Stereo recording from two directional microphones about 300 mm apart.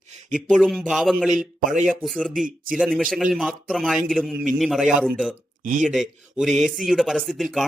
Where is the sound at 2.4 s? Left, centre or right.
Right.